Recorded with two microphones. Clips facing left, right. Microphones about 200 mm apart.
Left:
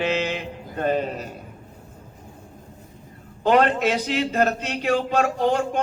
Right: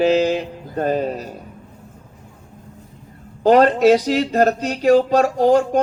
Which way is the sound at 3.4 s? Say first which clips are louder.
Right 6 dB; 40° right (ahead or behind).